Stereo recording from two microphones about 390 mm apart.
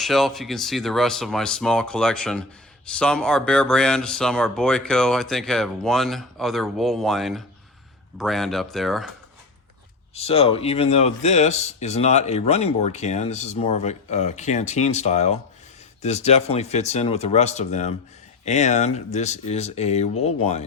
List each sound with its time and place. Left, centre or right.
0.0 s speech: centre
10.2 s speech: centre